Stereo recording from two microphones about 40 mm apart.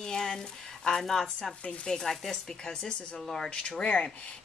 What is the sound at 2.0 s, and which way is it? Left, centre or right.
Speech, centre.